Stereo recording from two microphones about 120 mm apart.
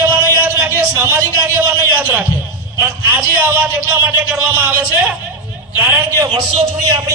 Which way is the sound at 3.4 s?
15° right (ahead or behind).